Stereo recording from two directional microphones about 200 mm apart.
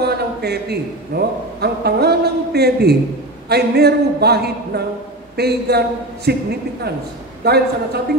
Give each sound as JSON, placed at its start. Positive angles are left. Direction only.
{"t": 0.0, "sound": "a man's voice", "side_deg": -55}
{"t": 7.4, "sound": "a man's voice", "side_deg": -55}